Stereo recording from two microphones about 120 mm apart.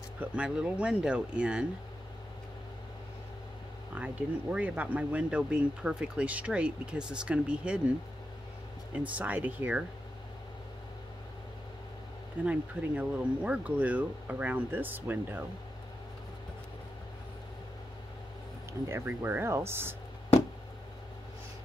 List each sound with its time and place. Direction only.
0.2 s speech: 10° right (ahead or behind)
3.9 s speech: 10° right (ahead or behind)
8.9 s speech: 10° right (ahead or behind)
12.4 s speech: 10° right (ahead or behind)
18.7 s speech: 20° right (ahead or behind)